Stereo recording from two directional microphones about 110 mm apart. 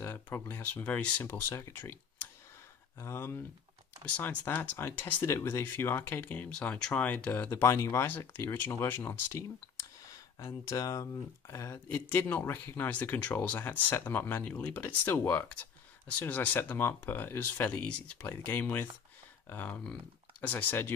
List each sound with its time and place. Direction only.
0.0 s speech: 20° left (ahead or behind)
3.0 s speech: 25° left (ahead or behind)
4.0 s speech: 10° left (ahead or behind)
10.1 s speech: 30° left (ahead or behind)